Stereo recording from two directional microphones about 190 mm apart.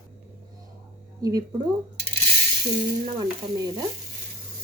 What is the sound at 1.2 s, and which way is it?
Speech, 20° right (ahead or behind).